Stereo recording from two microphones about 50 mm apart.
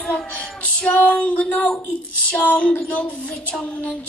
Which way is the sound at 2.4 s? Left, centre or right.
Left.